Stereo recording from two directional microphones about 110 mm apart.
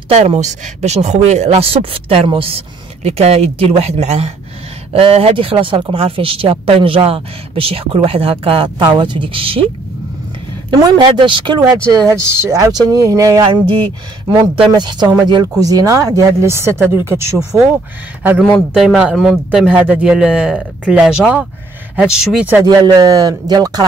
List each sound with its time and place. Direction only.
0.1 s speech: 75° right (ahead or behind)
4.9 s speech: 65° right (ahead or behind)
10.7 s speech: 35° right (ahead or behind)
11.9 s speech: 30° right (ahead or behind)
13.4 s speech: 50° right (ahead or behind); by 17.4 s 25° right (ahead or behind)
18.8 s speech: 5° right (ahead or behind)
22.8 s speech: 35° right (ahead or behind)